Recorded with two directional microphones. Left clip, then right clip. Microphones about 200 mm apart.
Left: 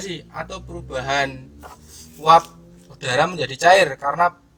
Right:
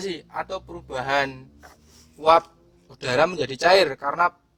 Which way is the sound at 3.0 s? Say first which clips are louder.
Left 1 dB; 60° right (ahead or behind).